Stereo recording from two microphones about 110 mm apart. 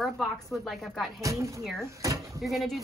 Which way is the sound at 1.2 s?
30° right (ahead or behind).